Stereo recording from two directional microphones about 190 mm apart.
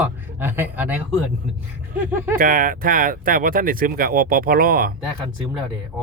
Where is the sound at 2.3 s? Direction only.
45° right (ahead or behind).